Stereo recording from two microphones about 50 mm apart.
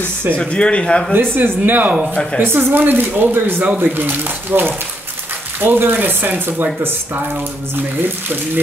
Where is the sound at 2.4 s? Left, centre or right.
Right.